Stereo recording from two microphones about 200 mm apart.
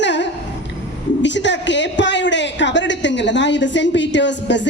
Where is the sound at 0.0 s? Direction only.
60° left (ahead or behind).